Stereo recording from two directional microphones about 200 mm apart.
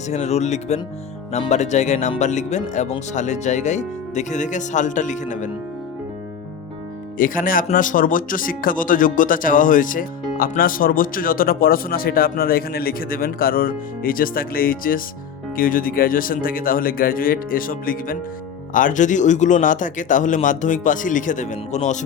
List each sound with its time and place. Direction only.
0.1 s a man's voice: 35° left (ahead or behind)
7.2 s a man's voice: 45° left (ahead or behind)